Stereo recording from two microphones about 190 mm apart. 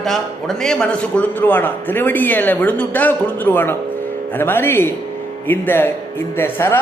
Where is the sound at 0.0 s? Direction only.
Centre (ahead or behind).